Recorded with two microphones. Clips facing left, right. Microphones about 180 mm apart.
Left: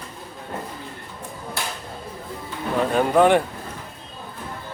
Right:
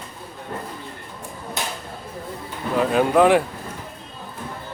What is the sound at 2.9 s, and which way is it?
Speech, centre (ahead or behind).